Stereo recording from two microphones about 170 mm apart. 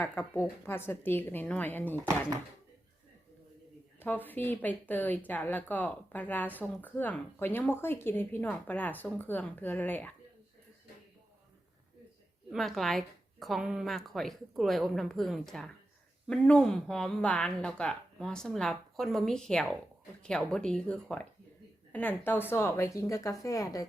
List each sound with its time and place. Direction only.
0.0 s speech: 10° left (ahead or behind)
4.0 s speech: 10° left (ahead or behind)
12.5 s speech: centre (ahead or behind); by 23.8 s 20° left (ahead or behind)